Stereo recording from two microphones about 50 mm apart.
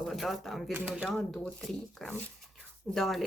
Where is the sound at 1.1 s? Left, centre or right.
Centre.